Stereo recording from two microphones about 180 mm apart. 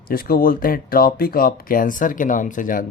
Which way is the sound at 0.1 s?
55° left (ahead or behind).